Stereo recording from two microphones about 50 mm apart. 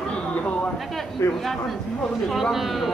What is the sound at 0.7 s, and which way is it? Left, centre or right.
A man's voice, centre.